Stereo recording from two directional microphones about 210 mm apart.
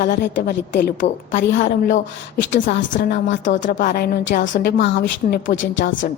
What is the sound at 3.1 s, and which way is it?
Speech, 60° left (ahead or behind).